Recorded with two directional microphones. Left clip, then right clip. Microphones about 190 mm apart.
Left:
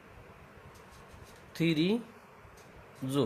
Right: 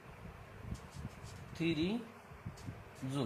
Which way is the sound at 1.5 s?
65° left (ahead or behind).